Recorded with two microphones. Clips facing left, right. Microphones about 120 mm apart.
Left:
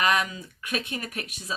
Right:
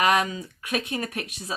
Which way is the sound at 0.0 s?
25° right (ahead or behind).